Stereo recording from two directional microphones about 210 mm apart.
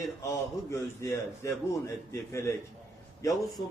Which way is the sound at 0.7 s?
15° left (ahead or behind).